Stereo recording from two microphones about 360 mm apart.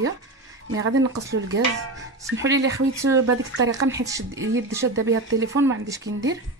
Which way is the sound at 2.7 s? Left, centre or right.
Centre.